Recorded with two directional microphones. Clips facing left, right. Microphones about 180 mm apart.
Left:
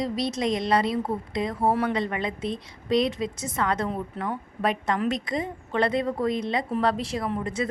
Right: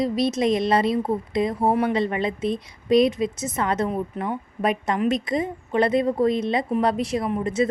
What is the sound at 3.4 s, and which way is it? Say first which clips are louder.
A woman's voice: even; 20° right (ahead or behind).